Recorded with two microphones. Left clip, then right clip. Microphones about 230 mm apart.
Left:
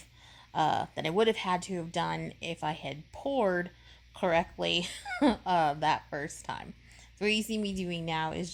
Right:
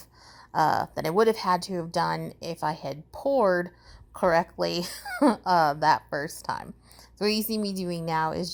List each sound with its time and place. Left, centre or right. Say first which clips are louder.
0.5 s speech: right 5 dB; right
6.1 s speech: right 6 dB; centre
6.3 s speech: right 7 dB; right